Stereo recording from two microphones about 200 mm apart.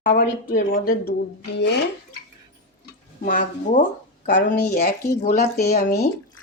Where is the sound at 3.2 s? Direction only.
40° left (ahead or behind).